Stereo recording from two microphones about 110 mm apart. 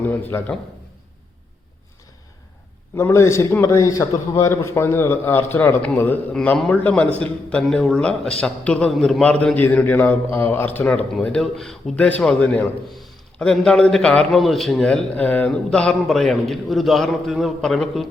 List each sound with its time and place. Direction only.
0.0 s a man's voice: 15° left (ahead or behind)
2.9 s a man's voice: 25° left (ahead or behind); by 18.1 s centre (ahead or behind)